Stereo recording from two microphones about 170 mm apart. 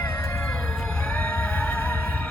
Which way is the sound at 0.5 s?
5° left (ahead or behind).